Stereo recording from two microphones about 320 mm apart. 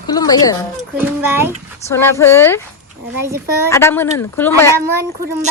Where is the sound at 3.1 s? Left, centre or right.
Centre.